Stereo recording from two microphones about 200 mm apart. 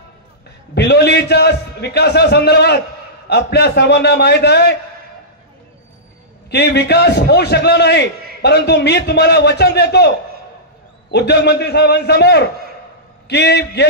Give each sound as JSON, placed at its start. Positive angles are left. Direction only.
{"t": 0.7, "sound": "a man's voice", "side_deg": 55}
{"t": 6.5, "sound": "a man's voice", "side_deg": 55}